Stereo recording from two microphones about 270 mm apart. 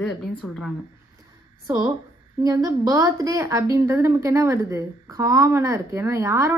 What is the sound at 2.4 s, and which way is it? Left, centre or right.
A woman's voice, centre.